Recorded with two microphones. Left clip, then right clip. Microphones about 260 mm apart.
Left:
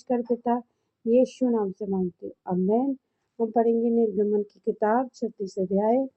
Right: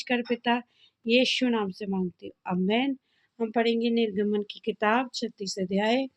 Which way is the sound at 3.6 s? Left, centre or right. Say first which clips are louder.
Left 2 dB; centre.